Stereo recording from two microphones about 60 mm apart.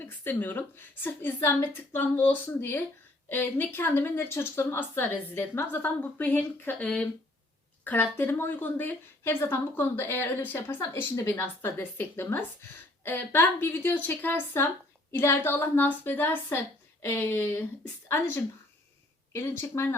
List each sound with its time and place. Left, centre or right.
0.0 s speech: left
7.9 s speech: left
16.5 s a woman's voice: left
19.3 s speech: left